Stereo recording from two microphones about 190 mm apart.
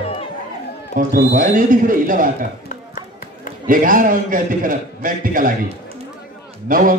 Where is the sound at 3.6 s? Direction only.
45° right (ahead or behind).